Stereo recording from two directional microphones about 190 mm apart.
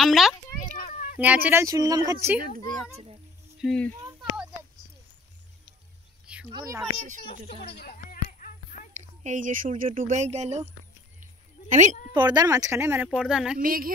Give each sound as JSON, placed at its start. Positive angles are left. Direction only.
{"t": 0.0, "sound": "a sound", "side_deg": 0}
{"t": 0.6, "sound": "children playing", "side_deg": 45}
{"t": 1.2, "sound": "speech", "side_deg": -10}
{"t": 3.6, "sound": "speech", "side_deg": 5}
{"t": 6.2, "sound": "a sound", "side_deg": -5}
{"t": 7.6, "sound": "a sound", "side_deg": 55}
{"t": 9.0, "sound": "speech", "side_deg": -40}
{"t": 11.7, "sound": "speech", "side_deg": -40}
{"t": 12.1, "sound": "speech", "side_deg": -20}
{"t": 13.6, "sound": "speech", "side_deg": -50}